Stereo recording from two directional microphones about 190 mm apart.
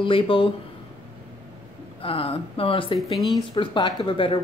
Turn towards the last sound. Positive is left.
turn(degrees=25)  # may be behind; listen again after turning